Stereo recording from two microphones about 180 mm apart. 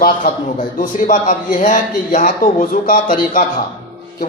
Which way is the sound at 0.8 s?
45° left (ahead or behind).